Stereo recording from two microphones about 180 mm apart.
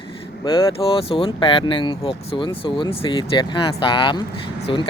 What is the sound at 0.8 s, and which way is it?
Speech, 30° left (ahead or behind).